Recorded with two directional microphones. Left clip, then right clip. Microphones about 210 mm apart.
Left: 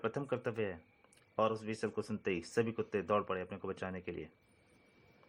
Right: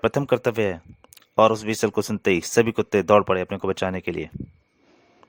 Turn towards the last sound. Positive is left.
turn(degrees=-55)  # may be behind; listen again after turning